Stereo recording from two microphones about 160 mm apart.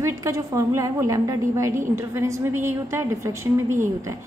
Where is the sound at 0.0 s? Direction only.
20° right (ahead or behind).